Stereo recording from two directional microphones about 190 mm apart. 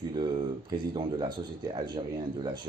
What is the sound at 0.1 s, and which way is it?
Speech, 25° right (ahead or behind).